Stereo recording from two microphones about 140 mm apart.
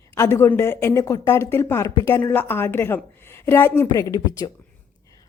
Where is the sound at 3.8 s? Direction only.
25° left (ahead or behind).